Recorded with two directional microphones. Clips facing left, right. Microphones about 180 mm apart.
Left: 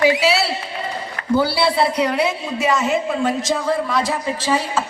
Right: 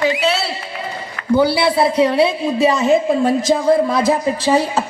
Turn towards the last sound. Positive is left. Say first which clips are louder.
# right 5 dB
turn(degrees=-40)  # may be behind; listen again after turning